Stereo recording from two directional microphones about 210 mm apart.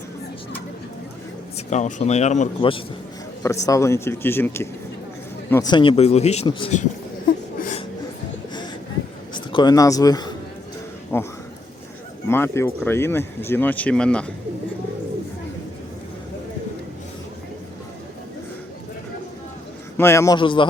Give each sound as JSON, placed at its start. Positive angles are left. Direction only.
{"t": 1.5, "sound": "speech", "side_deg": 35}
{"t": 3.4, "sound": "speech", "side_deg": 15}
{"t": 7.6, "sound": "a sound", "side_deg": 35}
{"t": 9.3, "sound": "a man's voice", "side_deg": 20}
{"t": 12.3, "sound": "speech", "side_deg": 10}
{"t": 20.0, "sound": "speech", "side_deg": 15}